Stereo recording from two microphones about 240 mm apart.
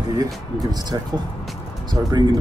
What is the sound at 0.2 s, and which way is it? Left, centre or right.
Speech, centre.